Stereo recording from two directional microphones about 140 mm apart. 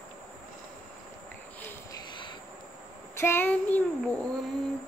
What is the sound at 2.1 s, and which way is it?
Vehicle, 35° left (ahead or behind).